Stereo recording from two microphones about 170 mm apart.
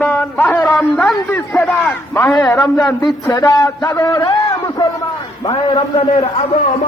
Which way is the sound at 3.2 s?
20° left (ahead or behind).